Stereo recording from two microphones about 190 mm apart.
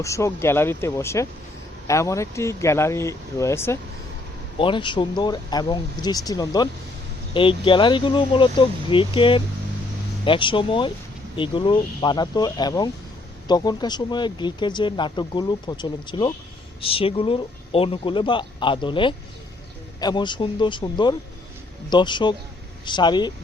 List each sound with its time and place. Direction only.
0.0 s speech: 15° left (ahead or behind)
4.5 s speech: 25° left (ahead or behind)